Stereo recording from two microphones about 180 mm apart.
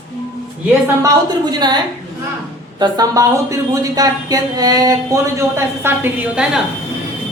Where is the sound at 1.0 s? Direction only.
20° right (ahead or behind).